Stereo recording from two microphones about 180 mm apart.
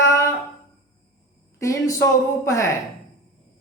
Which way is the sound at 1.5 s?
15° left (ahead or behind).